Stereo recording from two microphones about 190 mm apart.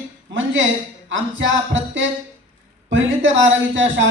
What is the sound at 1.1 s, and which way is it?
A man's voice, 85° right.